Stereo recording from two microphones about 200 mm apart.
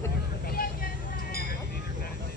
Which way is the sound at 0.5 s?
45° left (ahead or behind).